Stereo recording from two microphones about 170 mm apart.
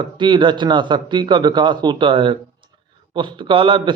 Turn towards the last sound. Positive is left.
turn(degrees=-30)  # may be behind; listen again after turning